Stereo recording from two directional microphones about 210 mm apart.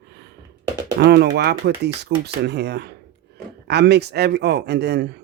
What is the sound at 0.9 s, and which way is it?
Speech, 55° right (ahead or behind).